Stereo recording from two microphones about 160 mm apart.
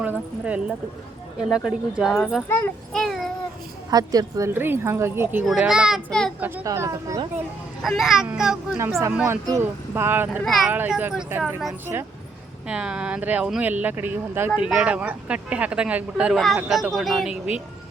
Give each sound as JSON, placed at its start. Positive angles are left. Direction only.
{"t": 0.0, "sound": "clip-clop", "side_deg": -10}
{"t": 1.4, "sound": "speech", "side_deg": -5}
{"t": 2.5, "sound": "speech", "side_deg": 15}
{"t": 2.9, "sound": "speech", "side_deg": 0}
{"t": 3.8, "sound": "speech", "side_deg": -25}
{"t": 6.4, "sound": "speech", "side_deg": -10}
{"t": 7.8, "sound": "speech", "side_deg": 0}
{"t": 8.8, "sound": "speech", "side_deg": -20}
{"t": 10.4, "sound": "speech", "side_deg": 0}